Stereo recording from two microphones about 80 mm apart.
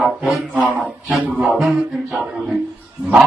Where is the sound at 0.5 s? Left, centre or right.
Centre.